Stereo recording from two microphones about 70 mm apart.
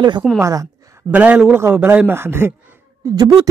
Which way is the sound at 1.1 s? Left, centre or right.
Centre.